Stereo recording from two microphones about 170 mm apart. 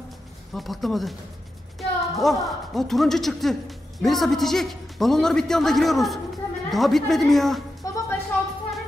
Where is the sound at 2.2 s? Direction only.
Centre (ahead or behind).